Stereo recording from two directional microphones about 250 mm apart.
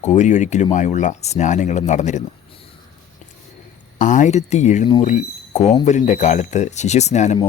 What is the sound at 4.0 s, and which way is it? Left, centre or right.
Speech, left.